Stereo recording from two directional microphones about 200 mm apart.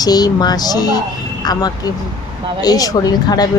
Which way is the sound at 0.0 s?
20° left (ahead or behind).